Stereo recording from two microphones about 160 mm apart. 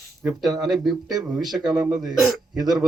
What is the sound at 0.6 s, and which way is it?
Speech, centre (ahead or behind).